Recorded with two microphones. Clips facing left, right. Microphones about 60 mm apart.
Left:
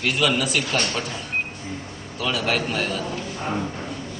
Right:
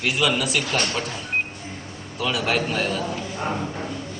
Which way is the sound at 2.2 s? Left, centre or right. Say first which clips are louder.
Right 1 dB; centre.